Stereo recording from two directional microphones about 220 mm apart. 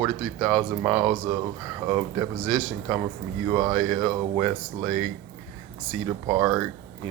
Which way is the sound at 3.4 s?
25° right (ahead or behind).